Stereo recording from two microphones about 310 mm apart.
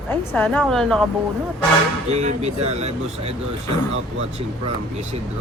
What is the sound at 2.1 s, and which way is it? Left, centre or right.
Speech, right.